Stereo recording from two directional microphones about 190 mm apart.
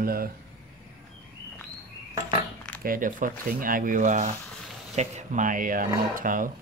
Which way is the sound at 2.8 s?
45° right (ahead or behind).